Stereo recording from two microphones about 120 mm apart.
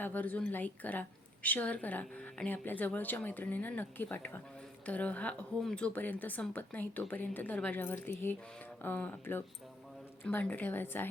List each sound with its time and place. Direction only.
0.0 s a woman's voice: 15° left (ahead or behind)